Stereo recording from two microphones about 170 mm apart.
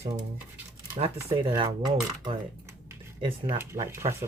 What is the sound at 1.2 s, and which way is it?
Speech, 30° right (ahead or behind).